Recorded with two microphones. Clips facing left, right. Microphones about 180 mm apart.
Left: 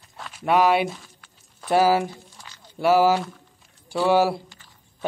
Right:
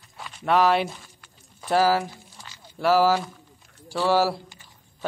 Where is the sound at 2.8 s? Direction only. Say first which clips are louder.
Left 2 dB; 15° left (ahead or behind).